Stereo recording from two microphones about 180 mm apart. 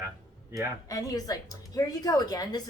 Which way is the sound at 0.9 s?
20° left (ahead or behind).